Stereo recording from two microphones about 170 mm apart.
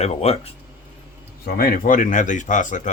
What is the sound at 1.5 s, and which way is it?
Speech, 60° left (ahead or behind).